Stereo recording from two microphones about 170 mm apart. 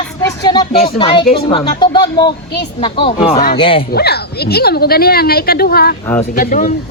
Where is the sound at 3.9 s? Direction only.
70° left (ahead or behind).